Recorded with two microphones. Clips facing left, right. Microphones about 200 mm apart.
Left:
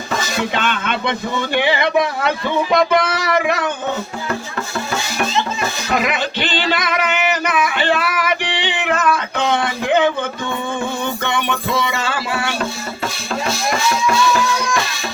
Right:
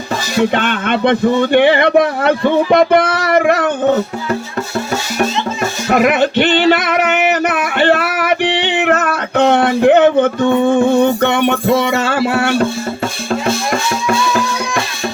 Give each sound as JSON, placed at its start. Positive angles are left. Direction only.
{"t": 0.5, "sound": "speech", "side_deg": -55}
{"t": 5.9, "sound": "music", "side_deg": -55}